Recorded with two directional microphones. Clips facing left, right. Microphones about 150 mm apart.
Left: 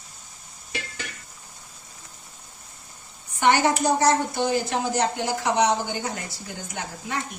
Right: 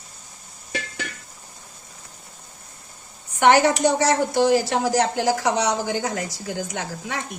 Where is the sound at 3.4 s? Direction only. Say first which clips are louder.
Right 4 dB; 75° right (ahead or behind).